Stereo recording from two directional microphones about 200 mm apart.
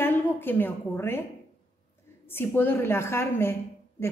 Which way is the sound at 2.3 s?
10° left (ahead or behind).